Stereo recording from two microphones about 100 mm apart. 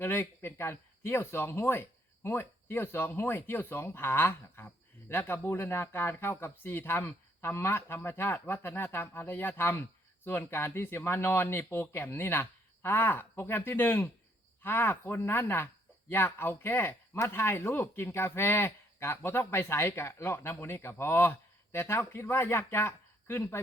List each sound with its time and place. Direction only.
0.0 s speech: 25° left (ahead or behind)